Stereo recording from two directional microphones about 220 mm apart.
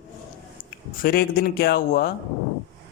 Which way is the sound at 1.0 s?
45° left (ahead or behind).